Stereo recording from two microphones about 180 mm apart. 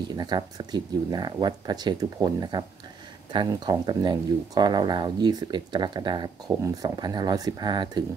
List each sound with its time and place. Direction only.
0.1 s speech: 25° right (ahead or behind)